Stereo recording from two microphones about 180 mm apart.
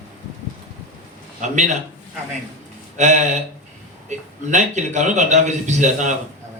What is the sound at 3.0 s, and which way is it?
A man's voice, 40° right (ahead or behind).